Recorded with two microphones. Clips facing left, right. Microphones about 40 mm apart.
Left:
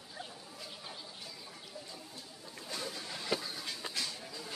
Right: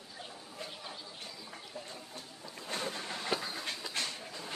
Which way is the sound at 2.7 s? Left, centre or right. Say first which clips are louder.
Right 4 dB; right.